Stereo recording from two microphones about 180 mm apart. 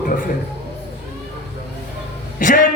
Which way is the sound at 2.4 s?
45° left (ahead or behind).